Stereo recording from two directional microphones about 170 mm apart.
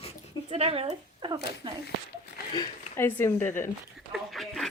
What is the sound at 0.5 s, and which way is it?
Speech, 35° right (ahead or behind).